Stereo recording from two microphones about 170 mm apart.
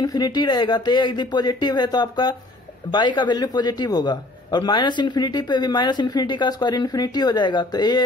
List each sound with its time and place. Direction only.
0.0 s a man's voice: 25° left (ahead or behind)